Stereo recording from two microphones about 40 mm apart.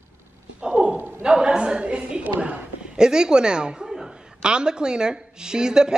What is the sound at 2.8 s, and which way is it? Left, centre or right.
A man's voice, centre.